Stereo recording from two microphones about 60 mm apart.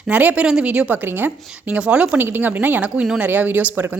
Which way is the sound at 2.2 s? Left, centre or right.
Right.